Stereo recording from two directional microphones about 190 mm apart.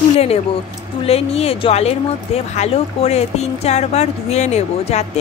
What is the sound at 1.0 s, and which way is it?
A woman's voice, 30° left (ahead or behind).